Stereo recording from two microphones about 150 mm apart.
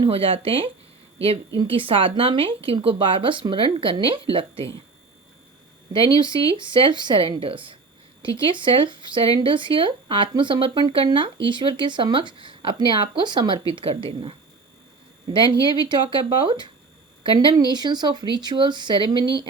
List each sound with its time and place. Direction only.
0.0 s speech: 35° right (ahead or behind)
6.1 s speech: 30° right (ahead or behind)
15.9 s speech: 30° right (ahead or behind)